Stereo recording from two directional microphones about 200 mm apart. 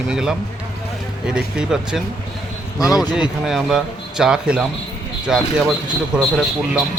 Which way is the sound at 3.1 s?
Centre (ahead or behind).